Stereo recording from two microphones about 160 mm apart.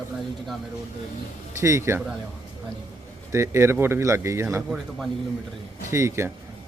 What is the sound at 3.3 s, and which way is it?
Speech, 15° right (ahead or behind).